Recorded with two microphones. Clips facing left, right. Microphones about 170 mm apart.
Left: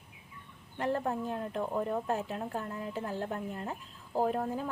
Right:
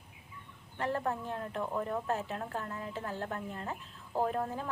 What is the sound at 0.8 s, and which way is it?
A woman's voice, 20° left (ahead or behind).